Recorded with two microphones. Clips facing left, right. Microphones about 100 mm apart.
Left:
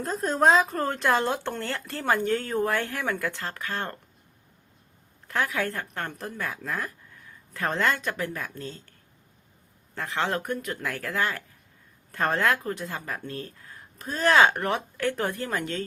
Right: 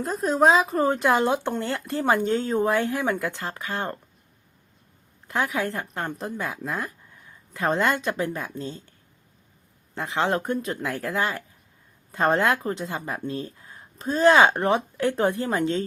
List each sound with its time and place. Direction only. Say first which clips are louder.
0.0 s speech: right 2 dB; 5° right (ahead or behind)
5.3 s speech: right 2 dB; 20° right (ahead or behind)